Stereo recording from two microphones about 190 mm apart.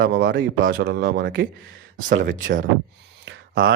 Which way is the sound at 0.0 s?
50° right (ahead or behind).